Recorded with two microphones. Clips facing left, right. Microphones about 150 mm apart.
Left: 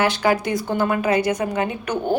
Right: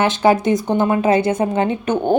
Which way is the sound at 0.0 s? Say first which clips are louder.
Right 4 dB; 25° right (ahead or behind).